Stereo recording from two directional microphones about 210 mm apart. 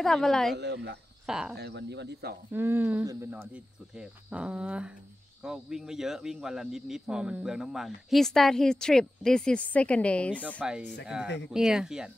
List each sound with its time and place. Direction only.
0.0 s speech: centre (ahead or behind)
0.6 s speech: 55° right (ahead or behind)
1.2 s speech: 5° right (ahead or behind)
1.6 s speech: 55° right (ahead or behind)
2.5 s speech: 10° right (ahead or behind)